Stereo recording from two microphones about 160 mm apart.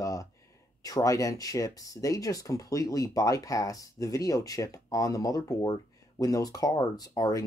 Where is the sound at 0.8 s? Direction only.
20° left (ahead or behind).